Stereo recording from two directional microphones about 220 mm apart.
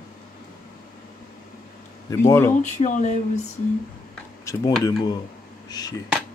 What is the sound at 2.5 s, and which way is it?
Mantra, 35° left (ahead or behind).